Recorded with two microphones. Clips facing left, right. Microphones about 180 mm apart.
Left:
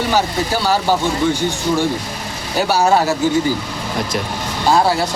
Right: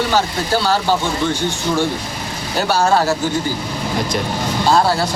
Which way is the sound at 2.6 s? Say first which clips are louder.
Left 1 dB; 10° left (ahead or behind).